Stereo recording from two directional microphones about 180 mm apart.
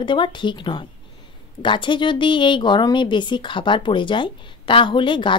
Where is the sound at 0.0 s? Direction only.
25° left (ahead or behind).